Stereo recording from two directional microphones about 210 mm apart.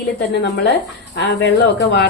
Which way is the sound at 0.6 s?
55° left (ahead or behind).